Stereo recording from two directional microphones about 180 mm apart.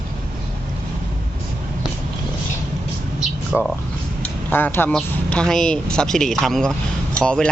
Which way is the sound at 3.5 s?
10° left (ahead or behind).